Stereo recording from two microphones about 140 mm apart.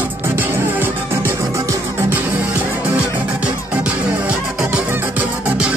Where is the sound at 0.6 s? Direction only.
15° right (ahead or behind).